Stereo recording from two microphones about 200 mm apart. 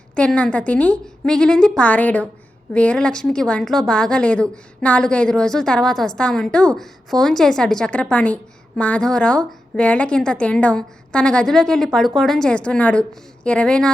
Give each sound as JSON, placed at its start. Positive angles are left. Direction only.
{"t": 0.1, "sound": "a woman's voice", "side_deg": 5}